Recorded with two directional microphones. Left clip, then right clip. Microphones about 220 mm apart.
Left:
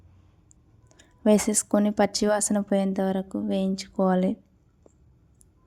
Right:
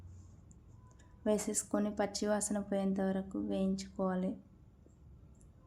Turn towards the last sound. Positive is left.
turn(degrees=40)  # may be behind; listen again after turning